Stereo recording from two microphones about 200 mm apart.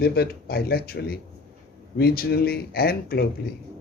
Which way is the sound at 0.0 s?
50° left (ahead or behind).